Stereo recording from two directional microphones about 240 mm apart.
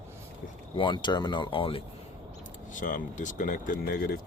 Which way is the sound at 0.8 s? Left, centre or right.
Centre.